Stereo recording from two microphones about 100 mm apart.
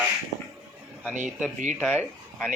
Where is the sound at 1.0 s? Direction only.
15° right (ahead or behind).